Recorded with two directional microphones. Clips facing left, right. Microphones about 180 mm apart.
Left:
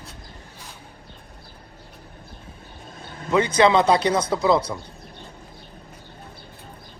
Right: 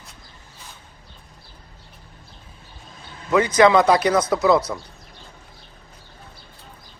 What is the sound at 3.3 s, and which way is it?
Speech, 30° left (ahead or behind).